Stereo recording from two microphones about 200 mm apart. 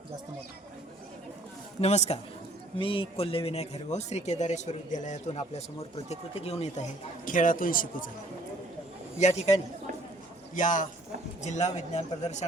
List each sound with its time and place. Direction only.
1.8 s speech: 35° left (ahead or behind)
7.3 s speech: 40° left (ahead or behind)
9.1 s speech: 35° left (ahead or behind)